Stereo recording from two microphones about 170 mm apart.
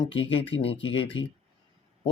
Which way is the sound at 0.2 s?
35° left (ahead or behind).